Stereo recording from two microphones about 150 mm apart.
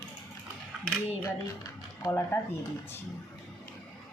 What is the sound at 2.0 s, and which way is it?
Speech, 15° left (ahead or behind).